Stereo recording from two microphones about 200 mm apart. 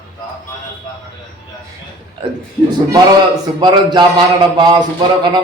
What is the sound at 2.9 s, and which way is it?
A man's voice, 20° right (ahead or behind).